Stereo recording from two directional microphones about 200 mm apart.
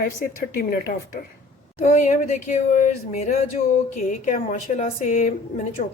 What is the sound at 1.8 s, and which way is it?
Speech, 35° left (ahead or behind).